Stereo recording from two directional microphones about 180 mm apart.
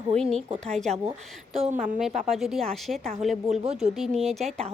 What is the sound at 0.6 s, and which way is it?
Speech, 40° right (ahead or behind).